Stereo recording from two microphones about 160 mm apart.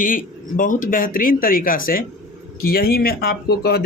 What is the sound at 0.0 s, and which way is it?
Speech, 55° left (ahead or behind).